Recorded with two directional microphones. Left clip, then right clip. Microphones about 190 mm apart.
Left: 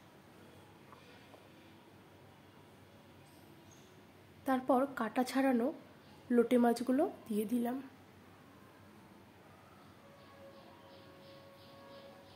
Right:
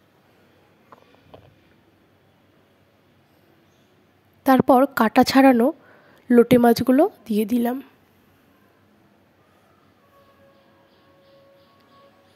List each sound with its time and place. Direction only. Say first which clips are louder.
4.5 s a woman's voice: right 16 dB; 60° right (ahead or behind)